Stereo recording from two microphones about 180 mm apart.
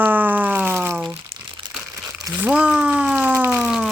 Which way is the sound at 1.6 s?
20° right (ahead or behind).